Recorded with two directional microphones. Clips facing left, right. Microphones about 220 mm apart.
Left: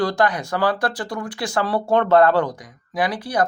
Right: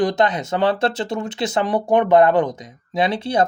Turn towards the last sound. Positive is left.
turn(degrees=-25)  # may be behind; listen again after turning